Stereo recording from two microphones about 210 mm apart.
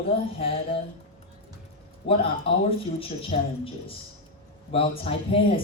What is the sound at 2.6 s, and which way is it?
Speech, 25° left (ahead or behind).